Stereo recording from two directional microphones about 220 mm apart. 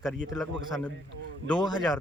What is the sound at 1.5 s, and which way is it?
Speech, 20° left (ahead or behind).